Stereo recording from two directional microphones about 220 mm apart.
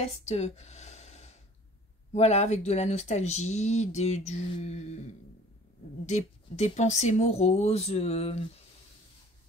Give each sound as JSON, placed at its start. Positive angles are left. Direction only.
{"t": 0.0, "sound": "a sound", "side_deg": 30}
{"t": 2.1, "sound": "speech", "side_deg": 30}
{"t": 6.0, "sound": "speech", "side_deg": 30}